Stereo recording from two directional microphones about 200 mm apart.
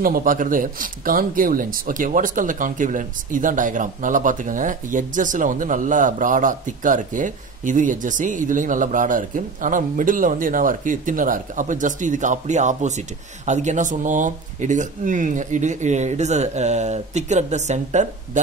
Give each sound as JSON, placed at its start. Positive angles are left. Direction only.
{"t": 0.0, "sound": "speech", "side_deg": -45}